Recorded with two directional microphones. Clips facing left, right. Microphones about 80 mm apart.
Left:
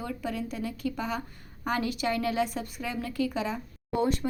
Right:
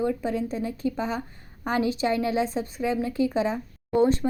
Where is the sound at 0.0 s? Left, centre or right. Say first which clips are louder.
Right 7 dB; right.